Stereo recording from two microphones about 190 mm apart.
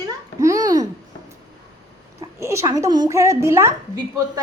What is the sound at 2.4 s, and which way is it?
Speech, 15° right (ahead or behind).